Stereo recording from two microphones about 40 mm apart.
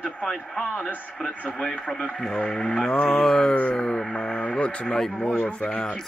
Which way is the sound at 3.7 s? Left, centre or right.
Left.